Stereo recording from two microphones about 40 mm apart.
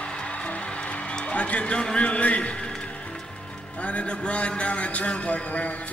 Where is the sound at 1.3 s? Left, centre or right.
Left.